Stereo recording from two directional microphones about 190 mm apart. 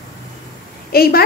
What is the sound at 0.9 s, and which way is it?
Speech, 50° left (ahead or behind).